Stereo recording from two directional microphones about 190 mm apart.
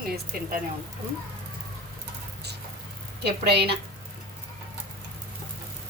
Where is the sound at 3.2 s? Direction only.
60° right (ahead or behind).